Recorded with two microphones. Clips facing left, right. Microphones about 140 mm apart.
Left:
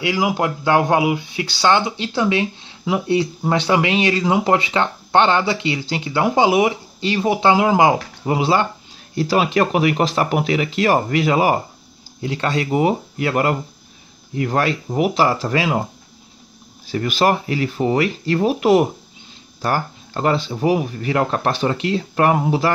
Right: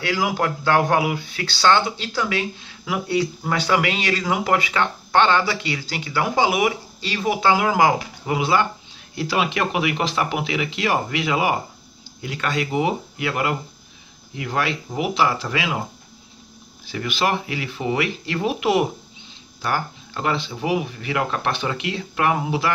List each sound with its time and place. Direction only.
0.0 s speech: 15° left (ahead or behind); by 15.8 s 40° left (ahead or behind)
16.8 s speech: 40° left (ahead or behind)